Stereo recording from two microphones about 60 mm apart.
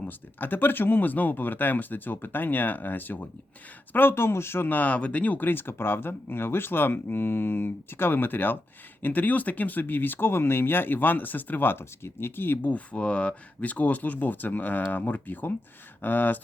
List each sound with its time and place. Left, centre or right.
0.0 s speech: left
12.7 s speech: left